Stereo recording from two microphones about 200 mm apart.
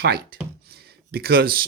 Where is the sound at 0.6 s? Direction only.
50° right (ahead or behind).